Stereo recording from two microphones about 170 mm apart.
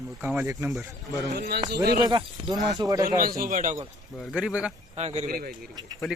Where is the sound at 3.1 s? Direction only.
55° right (ahead or behind).